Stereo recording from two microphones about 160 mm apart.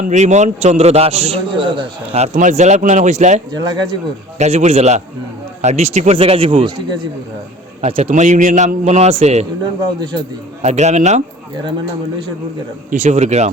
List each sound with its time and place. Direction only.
0.0 s a man's voice: 50° right (ahead or behind)
3.5 s speech: 25° right (ahead or behind)
4.4 s a man's voice: 45° right (ahead or behind)
10.6 s a man's voice: 45° right (ahead or behind)
12.9 s a man's voice: 50° right (ahead or behind)